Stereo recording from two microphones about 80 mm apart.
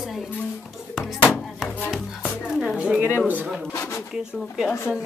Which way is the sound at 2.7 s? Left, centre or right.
Centre.